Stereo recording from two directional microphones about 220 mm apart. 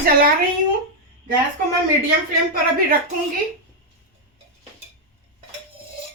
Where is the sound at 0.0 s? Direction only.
40° right (ahead or behind).